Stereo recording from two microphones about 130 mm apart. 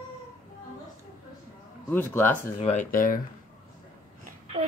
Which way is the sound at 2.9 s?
90° left.